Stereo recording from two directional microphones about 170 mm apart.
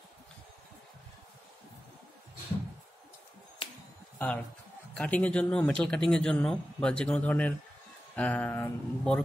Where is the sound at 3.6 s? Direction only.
30° left (ahead or behind).